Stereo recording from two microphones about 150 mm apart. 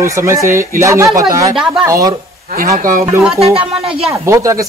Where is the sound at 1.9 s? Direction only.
20° right (ahead or behind).